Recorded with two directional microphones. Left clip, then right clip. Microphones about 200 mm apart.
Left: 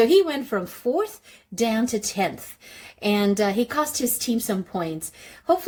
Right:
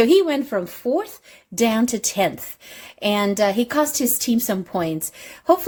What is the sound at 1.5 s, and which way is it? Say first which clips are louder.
A woman's voice: right 3 dB; 30° right (ahead or behind).